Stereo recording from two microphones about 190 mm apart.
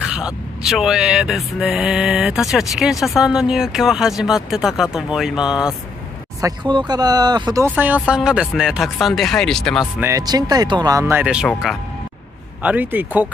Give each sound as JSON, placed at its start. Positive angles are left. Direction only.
{"t": 0.1, "sound": "speech", "side_deg": -5}
{"t": 6.4, "sound": "speech", "side_deg": -25}
{"t": 9.9, "sound": "speech", "side_deg": -15}